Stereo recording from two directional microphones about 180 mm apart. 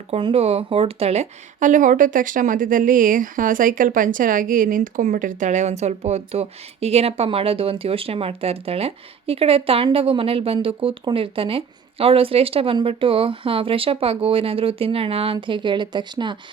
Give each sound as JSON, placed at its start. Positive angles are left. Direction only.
{"t": 0.1, "sound": "speech", "side_deg": -30}